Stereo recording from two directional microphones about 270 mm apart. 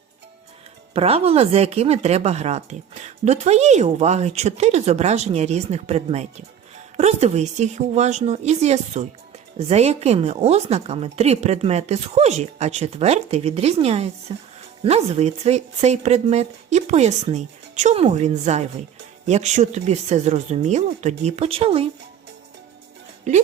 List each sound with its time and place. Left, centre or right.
0.9 s speech: right
23.3 s speech: right